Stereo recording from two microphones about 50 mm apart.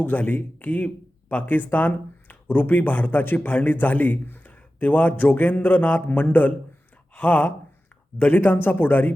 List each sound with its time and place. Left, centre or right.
0.0 s speech: left